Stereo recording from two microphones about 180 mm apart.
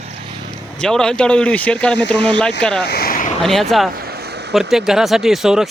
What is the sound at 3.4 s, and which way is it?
Speech, centre (ahead or behind).